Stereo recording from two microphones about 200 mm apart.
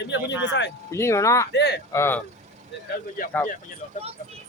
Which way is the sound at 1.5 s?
55° left (ahead or behind).